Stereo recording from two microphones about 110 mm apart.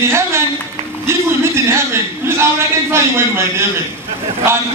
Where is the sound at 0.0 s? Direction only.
25° right (ahead or behind).